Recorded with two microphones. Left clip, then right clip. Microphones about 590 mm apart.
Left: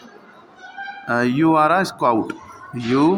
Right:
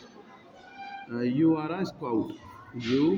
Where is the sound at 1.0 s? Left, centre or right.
Right.